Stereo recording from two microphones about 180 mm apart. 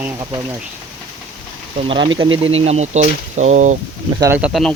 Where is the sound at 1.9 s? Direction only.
30° right (ahead or behind).